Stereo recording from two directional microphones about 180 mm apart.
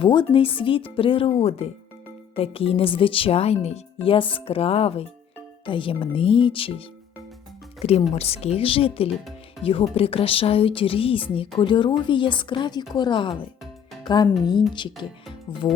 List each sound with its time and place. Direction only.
0.0 s speech: 25° left (ahead or behind)
14.0 s music: 25° left (ahead or behind)
15.0 s speech: 25° left (ahead or behind)